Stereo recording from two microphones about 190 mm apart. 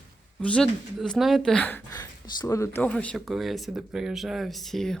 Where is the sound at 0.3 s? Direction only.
5° left (ahead or behind).